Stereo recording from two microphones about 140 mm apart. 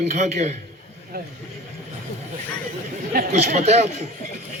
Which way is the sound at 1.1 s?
90° right.